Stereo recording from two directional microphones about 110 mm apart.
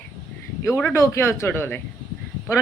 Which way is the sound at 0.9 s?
25° left (ahead or behind).